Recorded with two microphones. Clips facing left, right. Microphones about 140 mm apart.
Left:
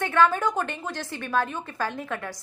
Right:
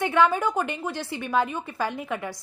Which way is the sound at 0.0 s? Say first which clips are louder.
Even; 15° right (ahead or behind).